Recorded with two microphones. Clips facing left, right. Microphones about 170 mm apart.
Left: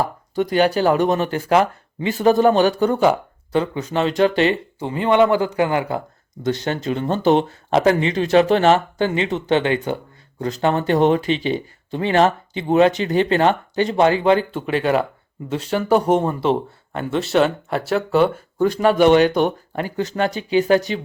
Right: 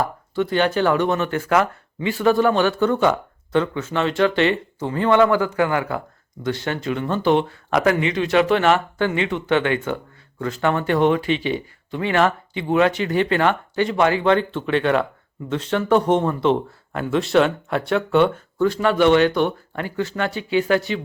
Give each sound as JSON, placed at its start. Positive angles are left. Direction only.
{"t": 0.4, "sound": "speech", "side_deg": 15}
{"t": 0.7, "sound": "speech", "side_deg": 35}
{"t": 2.7, "sound": "speech", "side_deg": 15}
{"t": 4.2, "sound": "speech", "side_deg": 35}
{"t": 4.8, "sound": "speech", "side_deg": 20}
{"t": 6.8, "sound": "speech", "side_deg": 35}
{"t": 14.3, "sound": "speech", "side_deg": 10}
{"t": 18.9, "sound": "speech", "side_deg": 15}
{"t": 20.1, "sound": "speech", "side_deg": 35}